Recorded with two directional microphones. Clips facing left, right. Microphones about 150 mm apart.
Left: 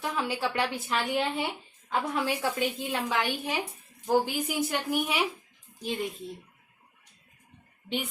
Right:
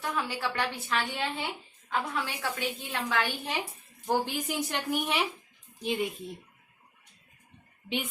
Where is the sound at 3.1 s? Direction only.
10° left (ahead or behind).